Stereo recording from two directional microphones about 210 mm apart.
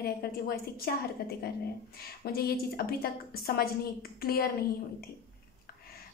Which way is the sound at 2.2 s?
45° left (ahead or behind).